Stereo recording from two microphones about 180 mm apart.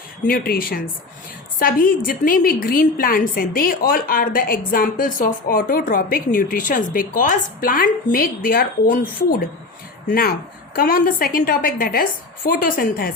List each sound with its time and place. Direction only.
0.3 s a woman's voice: 55° left (ahead or behind)
10.1 s a woman's voice: 55° left (ahead or behind)